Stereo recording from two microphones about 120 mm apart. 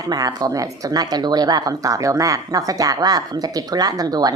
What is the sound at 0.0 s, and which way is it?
A woman's voice, 30° right (ahead or behind).